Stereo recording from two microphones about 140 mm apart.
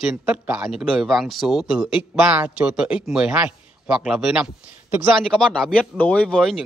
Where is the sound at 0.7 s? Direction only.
Centre (ahead or behind).